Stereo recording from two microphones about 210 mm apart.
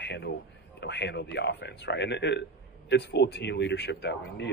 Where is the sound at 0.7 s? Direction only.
55° left (ahead or behind).